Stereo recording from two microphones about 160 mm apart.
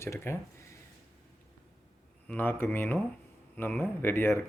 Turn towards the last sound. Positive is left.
turn(degrees=15)  # may be behind; listen again after turning